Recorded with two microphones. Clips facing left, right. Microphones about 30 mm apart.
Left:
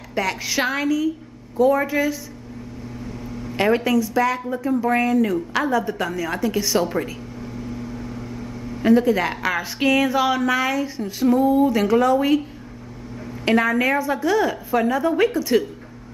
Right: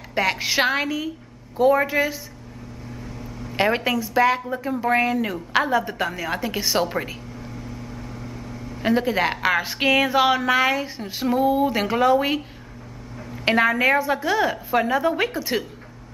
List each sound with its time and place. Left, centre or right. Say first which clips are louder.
0.1 s a woman's voice: right 1 dB; right
3.5 s a woman's voice: left 2 dB; right
7.3 s microwave oven: left 4 dB; centre
8.8 s a woman's voice: left 3 dB; right
13.5 s a woman's voice: even; right